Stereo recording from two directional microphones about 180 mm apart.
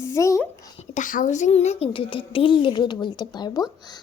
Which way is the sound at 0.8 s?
45° left (ahead or behind).